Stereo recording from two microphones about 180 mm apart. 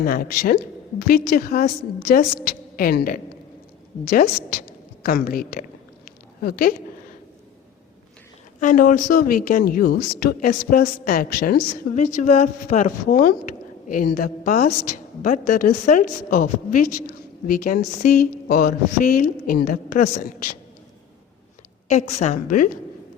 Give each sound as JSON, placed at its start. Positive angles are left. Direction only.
{"t": 0.0, "sound": "a woman's voice", "side_deg": 55}
{"t": 8.6, "sound": "a woman's voice", "side_deg": 45}
{"t": 21.8, "sound": "a woman's voice", "side_deg": 40}